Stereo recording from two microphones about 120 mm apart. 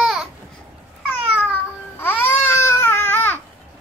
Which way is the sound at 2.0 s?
15° left (ahead or behind).